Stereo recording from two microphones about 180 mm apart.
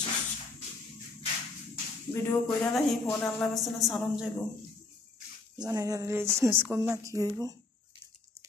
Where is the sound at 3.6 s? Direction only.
Centre (ahead or behind).